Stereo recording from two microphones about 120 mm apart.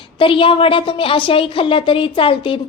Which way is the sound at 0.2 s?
45° left (ahead or behind).